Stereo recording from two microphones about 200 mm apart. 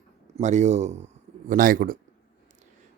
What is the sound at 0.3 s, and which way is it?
A man's voice, 35° right (ahead or behind).